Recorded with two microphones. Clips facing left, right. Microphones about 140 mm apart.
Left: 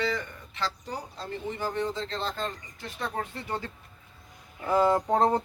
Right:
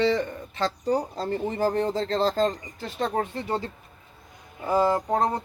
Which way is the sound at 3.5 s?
20° right (ahead or behind).